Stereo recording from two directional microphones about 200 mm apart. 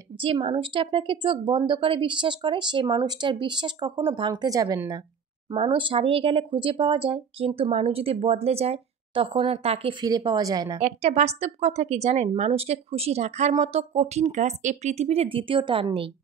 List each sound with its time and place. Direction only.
0.2 s speech: 25° right (ahead or behind)
10.8 s speech: 35° right (ahead or behind)